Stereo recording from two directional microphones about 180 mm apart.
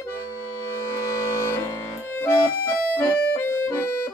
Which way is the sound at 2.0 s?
10° left (ahead or behind).